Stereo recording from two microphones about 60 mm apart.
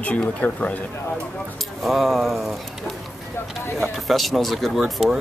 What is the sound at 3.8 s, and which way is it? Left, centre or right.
Speech, centre.